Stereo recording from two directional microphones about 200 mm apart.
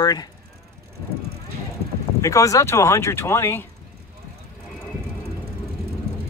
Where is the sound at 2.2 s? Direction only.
15° left (ahead or behind).